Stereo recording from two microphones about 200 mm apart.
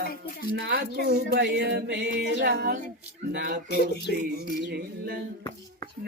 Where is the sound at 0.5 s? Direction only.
60° right (ahead or behind).